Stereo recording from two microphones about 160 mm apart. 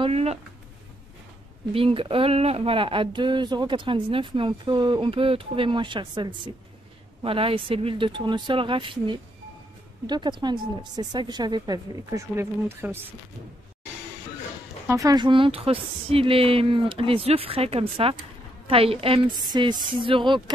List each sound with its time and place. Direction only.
0.0 s speech: 40° right (ahead or behind)
1.7 s speech: 35° right (ahead or behind); by 12.9 s 15° right (ahead or behind)
14.9 s speech: 20° right (ahead or behind)